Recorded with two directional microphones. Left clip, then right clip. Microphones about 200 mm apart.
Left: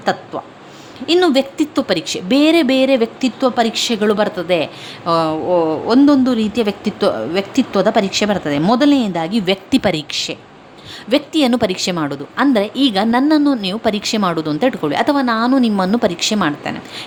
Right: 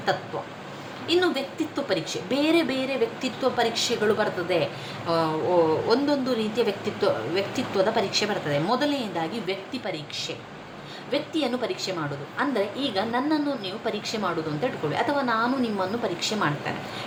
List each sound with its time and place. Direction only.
1.0 s a woman's voice: 60° left (ahead or behind)